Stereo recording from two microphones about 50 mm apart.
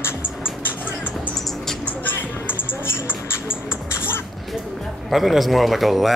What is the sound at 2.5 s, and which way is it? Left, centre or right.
Music, left.